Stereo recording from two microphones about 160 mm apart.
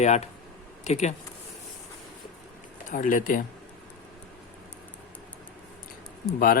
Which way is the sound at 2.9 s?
55° left (ahead or behind).